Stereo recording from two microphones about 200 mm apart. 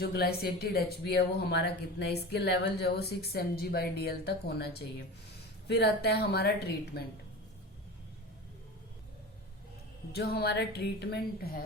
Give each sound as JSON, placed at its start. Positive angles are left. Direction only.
{"t": 0.0, "sound": "speech", "side_deg": 50}
{"t": 10.1, "sound": "a woman's voice", "side_deg": 55}